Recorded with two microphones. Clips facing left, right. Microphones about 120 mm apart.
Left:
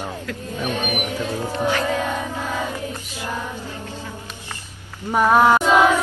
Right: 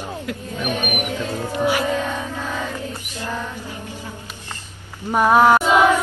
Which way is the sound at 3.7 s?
15° right (ahead or behind).